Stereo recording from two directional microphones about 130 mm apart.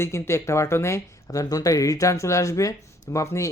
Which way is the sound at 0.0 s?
20° left (ahead or behind).